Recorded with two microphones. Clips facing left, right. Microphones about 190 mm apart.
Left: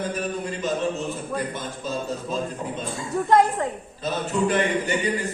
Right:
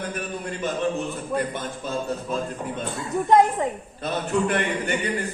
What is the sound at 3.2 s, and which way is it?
Speech, 20° right (ahead or behind).